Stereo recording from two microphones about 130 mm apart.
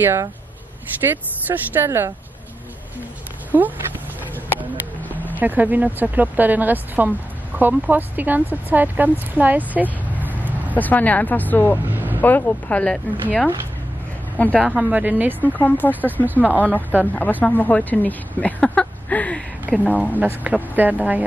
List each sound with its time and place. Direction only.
0.0 s speech: 20° right (ahead or behind)
3.5 s speech: 20° right (ahead or behind)
5.4 s speech: 15° right (ahead or behind)
10.7 s a woman's voice: 15° left (ahead or behind)
11.9 s a sound: 15° right (ahead or behind)
12.2 s a woman's voice: 15° left (ahead or behind)
14.4 s a woman's voice: 10° left (ahead or behind)
14.8 s speech: 10° right (ahead or behind)
15.4 s a woman's voice: 15° left (ahead or behind)
16.3 s speech: 15° right (ahead or behind)
16.5 s a woman's voice: 10° left (ahead or behind)
20.2 s speech: 10° right (ahead or behind)